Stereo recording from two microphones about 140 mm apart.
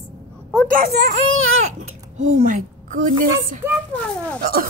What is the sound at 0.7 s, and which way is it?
Speech, 80° right.